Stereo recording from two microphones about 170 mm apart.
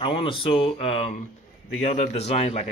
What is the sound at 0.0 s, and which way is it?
Speech, 30° left (ahead or behind).